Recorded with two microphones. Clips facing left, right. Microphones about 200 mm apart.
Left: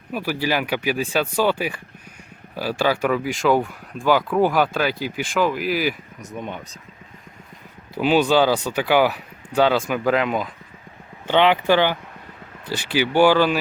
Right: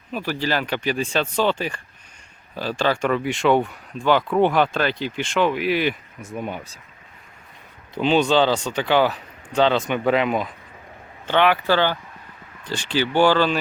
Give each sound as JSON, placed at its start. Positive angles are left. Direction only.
{"t": 0.1, "sound": "speech", "side_deg": 10}
{"t": 7.9, "sound": "speech", "side_deg": 5}
{"t": 11.3, "sound": "speech", "side_deg": 20}